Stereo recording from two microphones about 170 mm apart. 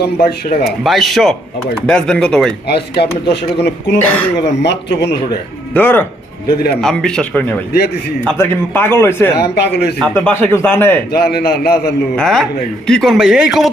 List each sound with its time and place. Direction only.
0.0 s speech: 70° left (ahead or behind)
0.9 s speech: centre (ahead or behind)
2.6 s speech: 75° left (ahead or behind)
3.9 s a man's voice: 10° left (ahead or behind)
4.4 s speech: 85° left
5.7 s a man's voice: 10° left (ahead or behind)
6.5 s a man's voice: 60° left (ahead or behind)
6.8 s a man's voice: 5° left (ahead or behind)
9.4 s speech: 75° left (ahead or behind)
10.0 s a man's voice: 5° left (ahead or behind)
11.2 s speech: 65° left (ahead or behind)
12.1 s speech: centre (ahead or behind)